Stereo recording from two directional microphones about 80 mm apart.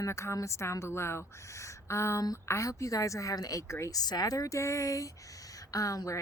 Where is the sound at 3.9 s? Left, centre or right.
Left.